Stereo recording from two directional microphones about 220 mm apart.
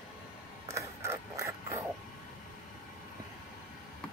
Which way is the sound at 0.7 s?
15° right (ahead or behind).